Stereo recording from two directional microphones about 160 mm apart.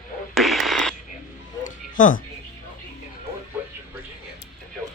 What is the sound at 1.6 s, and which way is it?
Music, 55° left (ahead or behind).